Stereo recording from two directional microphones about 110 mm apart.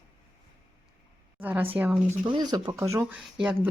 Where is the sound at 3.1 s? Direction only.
10° right (ahead or behind).